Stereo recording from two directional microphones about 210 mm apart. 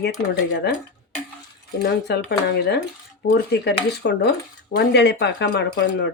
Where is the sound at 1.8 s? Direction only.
50° left (ahead or behind).